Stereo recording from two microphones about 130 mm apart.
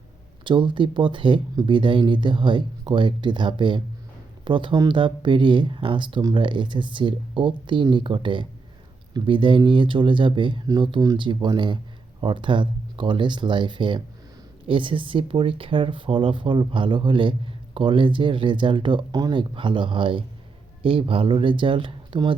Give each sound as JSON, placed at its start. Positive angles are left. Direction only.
{"t": 0.4, "sound": "speech", "side_deg": -40}